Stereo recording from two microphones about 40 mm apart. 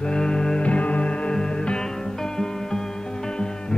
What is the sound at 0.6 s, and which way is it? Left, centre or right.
Music, left.